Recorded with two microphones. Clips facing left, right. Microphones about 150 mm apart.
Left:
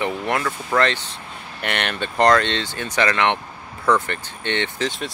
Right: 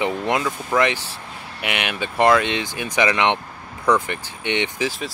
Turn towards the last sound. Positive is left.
turn(degrees=-15)  # may be behind; listen again after turning